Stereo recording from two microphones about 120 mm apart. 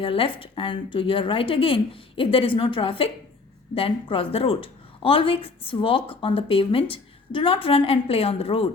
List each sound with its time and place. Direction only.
0.0 s speech: 50° left (ahead or behind)